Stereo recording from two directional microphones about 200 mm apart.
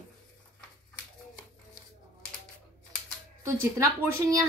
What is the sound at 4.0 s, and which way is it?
Speech, 15° right (ahead or behind).